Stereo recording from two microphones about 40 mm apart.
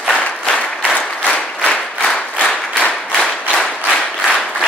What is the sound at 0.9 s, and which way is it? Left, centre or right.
Applause, left.